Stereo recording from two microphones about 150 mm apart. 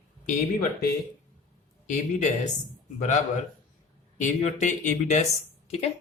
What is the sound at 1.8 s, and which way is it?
Speech, 55° left (ahead or behind).